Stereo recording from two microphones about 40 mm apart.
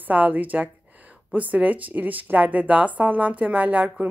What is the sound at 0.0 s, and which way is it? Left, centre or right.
A woman's voice, right.